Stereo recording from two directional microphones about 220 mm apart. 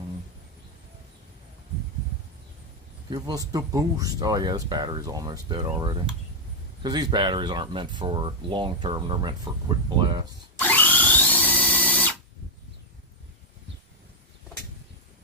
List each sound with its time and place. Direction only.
3.1 s speech: 15° right (ahead or behind)
10.6 s drill: 10° left (ahead or behind)